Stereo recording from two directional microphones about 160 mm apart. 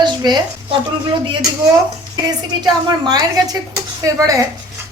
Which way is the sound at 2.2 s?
25° right (ahead or behind).